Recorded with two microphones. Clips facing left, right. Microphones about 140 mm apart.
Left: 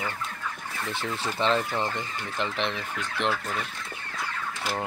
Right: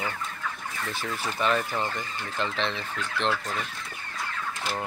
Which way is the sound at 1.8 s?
15° left (ahead or behind).